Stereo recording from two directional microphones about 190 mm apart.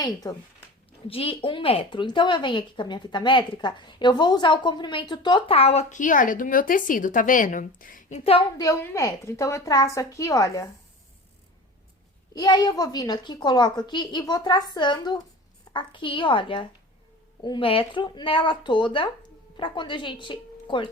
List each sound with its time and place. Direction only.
0.0 s a woman's voice: 20° left (ahead or behind); by 8.2 s 45° left (ahead or behind)
8.2 s a woman's voice: 30° left (ahead or behind)
12.3 s a woman's voice: 20° left (ahead or behind)